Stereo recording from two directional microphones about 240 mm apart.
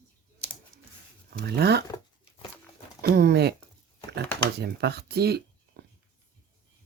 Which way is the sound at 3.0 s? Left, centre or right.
Right.